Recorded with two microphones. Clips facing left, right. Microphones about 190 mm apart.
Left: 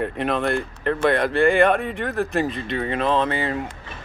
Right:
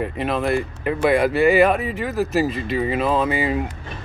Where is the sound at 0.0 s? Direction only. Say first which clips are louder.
Even; centre (ahead or behind).